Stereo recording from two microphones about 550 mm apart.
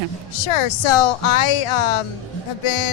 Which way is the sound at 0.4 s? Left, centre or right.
Left.